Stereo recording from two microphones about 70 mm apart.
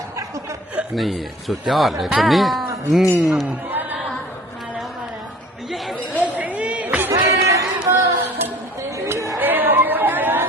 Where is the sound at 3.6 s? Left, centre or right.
Right.